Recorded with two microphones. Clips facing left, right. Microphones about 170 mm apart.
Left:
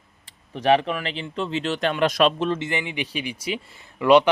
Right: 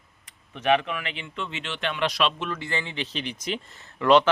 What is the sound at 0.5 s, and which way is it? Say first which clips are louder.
Speech: left 4 dB; 35° left (ahead or behind).